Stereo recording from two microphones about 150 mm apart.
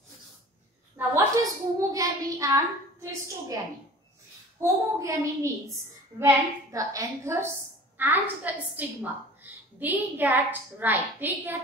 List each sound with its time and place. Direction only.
0.9 s a child's voice: 20° right (ahead or behind)
4.6 s a woman's voice: 20° right (ahead or behind)